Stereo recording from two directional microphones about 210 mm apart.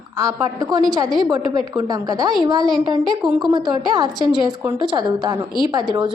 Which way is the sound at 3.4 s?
20° right (ahead or behind).